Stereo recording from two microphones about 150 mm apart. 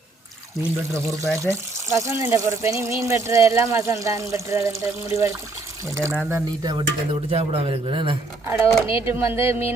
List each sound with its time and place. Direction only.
1.4 s speech: 20° right (ahead or behind)
6.6 s speech: 25° right (ahead or behind)
7.3 s a man's voice: 40° right (ahead or behind)
8.4 s speech: 20° right (ahead or behind)